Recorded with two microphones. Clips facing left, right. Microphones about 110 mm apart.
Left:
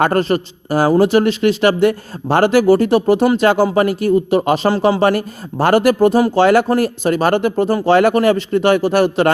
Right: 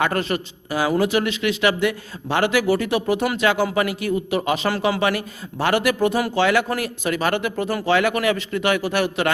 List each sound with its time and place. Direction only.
0.0 s a man's voice: 35° left (ahead or behind)